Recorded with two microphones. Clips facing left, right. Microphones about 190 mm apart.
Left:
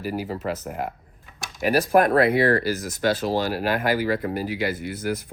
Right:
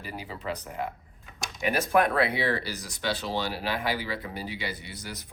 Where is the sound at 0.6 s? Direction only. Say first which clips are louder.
Left 4 dB; 50° left (ahead or behind).